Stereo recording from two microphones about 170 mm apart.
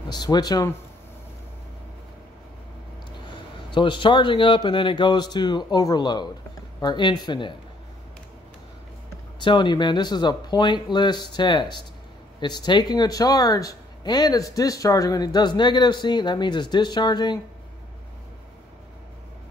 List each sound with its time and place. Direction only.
0.1 s speech: 25° left (ahead or behind)
3.3 s speech: 30° left (ahead or behind)
9.4 s speech: 25° left (ahead or behind)